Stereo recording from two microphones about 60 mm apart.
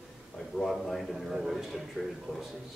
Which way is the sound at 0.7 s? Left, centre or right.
Centre.